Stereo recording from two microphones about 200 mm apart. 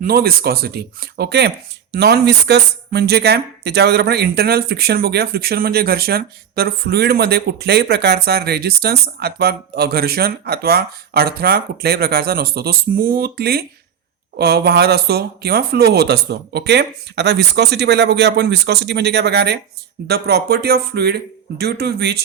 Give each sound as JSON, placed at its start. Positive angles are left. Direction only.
{"t": 0.0, "sound": "speech", "side_deg": -50}